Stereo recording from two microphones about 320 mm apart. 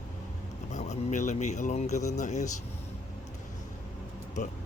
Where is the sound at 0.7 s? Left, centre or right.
Left.